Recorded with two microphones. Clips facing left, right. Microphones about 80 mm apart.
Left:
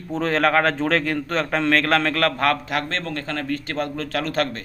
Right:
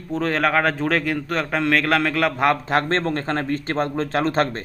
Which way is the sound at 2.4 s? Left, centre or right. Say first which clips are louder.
Right 3 dB; right.